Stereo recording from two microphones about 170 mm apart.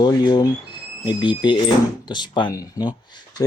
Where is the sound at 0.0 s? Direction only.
25° left (ahead or behind).